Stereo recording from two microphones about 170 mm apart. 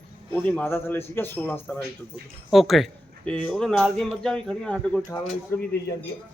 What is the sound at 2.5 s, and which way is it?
Speech, centre (ahead or behind).